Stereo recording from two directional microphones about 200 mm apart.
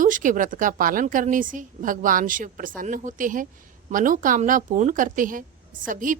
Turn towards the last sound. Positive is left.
turn(degrees=-40)  # may be behind; listen again after turning